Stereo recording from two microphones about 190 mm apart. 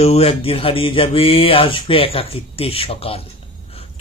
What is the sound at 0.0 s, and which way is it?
A man's voice, 30° left (ahead or behind).